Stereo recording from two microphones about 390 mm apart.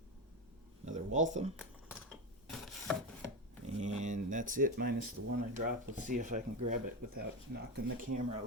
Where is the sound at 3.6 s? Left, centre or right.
Centre.